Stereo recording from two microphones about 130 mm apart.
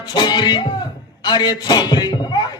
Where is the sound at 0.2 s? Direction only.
35° left (ahead or behind).